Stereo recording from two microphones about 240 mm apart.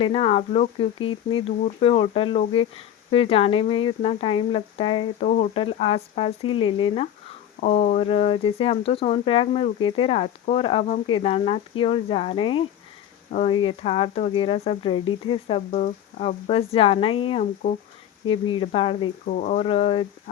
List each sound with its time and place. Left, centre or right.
0.0 s speech: left